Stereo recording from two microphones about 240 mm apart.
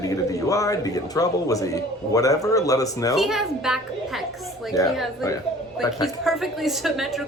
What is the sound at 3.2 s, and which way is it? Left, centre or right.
A woman's voice, centre.